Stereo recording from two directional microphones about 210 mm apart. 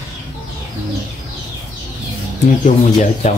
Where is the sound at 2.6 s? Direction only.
35° left (ahead or behind).